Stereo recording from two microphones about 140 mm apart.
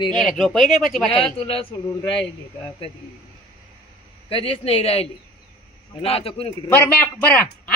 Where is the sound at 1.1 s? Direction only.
40° left (ahead or behind).